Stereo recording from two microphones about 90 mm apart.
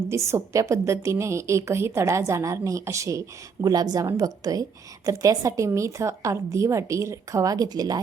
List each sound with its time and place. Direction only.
0.1 s a woman's voice: 30° right (ahead or behind)